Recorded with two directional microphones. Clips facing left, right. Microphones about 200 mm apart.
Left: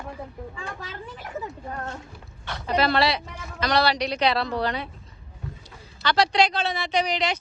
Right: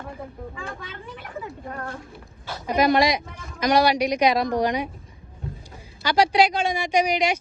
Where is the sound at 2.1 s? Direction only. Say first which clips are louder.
Right 1 dB; 5° right (ahead or behind).